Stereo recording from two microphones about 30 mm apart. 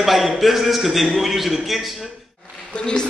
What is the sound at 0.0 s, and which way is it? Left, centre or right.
A man's voice, centre.